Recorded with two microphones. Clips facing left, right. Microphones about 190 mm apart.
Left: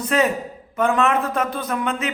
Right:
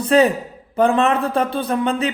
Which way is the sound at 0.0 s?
30° right (ahead or behind).